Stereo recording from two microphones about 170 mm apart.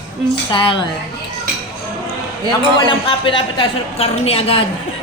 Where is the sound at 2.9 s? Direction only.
30° left (ahead or behind).